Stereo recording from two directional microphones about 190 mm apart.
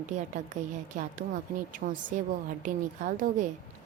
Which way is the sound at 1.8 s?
55° right (ahead or behind).